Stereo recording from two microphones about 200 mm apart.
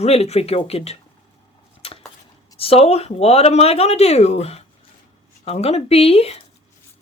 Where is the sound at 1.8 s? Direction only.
30° left (ahead or behind).